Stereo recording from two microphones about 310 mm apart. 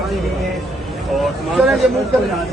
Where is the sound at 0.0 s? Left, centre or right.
Centre.